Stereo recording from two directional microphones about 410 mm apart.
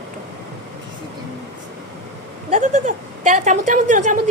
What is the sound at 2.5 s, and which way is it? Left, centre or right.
A woman's voice, centre.